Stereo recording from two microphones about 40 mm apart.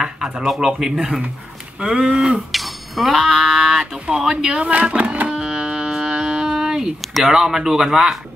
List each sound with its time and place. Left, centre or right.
0.6 s speech: centre
2.5 s a sound: centre
4.2 s speech: centre
4.6 s speech: right
5.3 s music: centre
7.2 s speech: centre